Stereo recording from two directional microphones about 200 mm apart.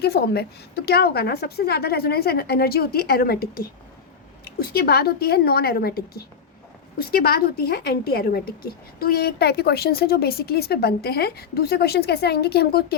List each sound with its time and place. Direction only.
0.0 s a woman's voice: 55° left (ahead or behind)